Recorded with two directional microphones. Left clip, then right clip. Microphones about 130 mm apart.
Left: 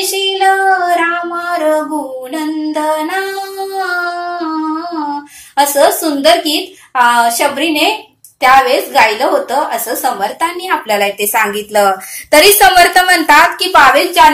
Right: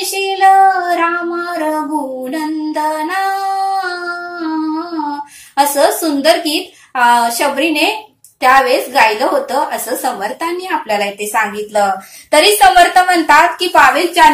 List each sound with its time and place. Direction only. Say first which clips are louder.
0.3 s child singing: right 3 dB; 15° left (ahead or behind)
2.3 s music: left 2 dB; 15° left (ahead or behind)
5.6 s a woman's voice: left 2 dB; 15° left (ahead or behind)
10.7 s a woman's voice: left 3 dB; 30° left (ahead or behind)